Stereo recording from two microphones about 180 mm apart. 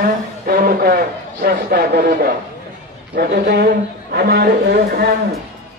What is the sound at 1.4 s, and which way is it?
Speech, 60° right (ahead or behind).